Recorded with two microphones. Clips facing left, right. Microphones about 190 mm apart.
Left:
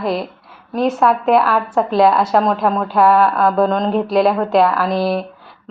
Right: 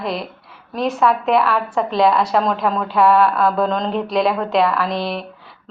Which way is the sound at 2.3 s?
45° left (ahead or behind).